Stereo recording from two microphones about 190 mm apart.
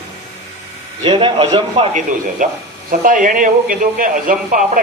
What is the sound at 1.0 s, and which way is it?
A man's voice, 25° right (ahead or behind).